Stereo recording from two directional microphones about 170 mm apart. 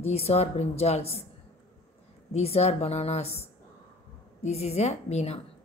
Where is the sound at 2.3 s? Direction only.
35° left (ahead or behind).